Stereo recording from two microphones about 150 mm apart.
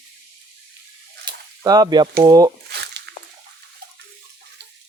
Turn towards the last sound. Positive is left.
turn(degrees=-90)